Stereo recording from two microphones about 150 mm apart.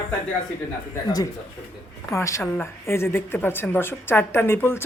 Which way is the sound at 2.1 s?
20° left (ahead or behind).